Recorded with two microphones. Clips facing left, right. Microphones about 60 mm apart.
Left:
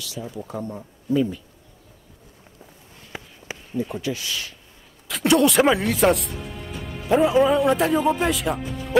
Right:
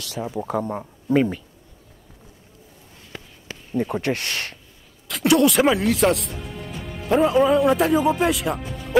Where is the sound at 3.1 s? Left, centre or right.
Centre.